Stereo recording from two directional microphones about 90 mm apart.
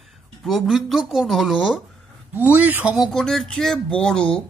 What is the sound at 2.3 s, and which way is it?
Speech, 15° right (ahead or behind).